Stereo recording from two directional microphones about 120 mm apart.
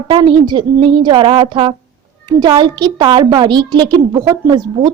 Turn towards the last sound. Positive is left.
turn(degrees=-30)  # may be behind; listen again after turning